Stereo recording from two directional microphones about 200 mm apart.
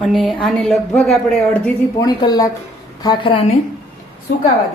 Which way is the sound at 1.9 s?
20° left (ahead or behind).